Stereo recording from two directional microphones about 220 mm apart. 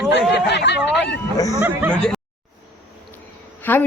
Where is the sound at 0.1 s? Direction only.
50° left (ahead or behind).